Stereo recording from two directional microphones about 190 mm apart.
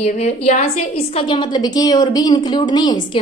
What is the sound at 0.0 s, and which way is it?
A woman's voice, 35° left (ahead or behind).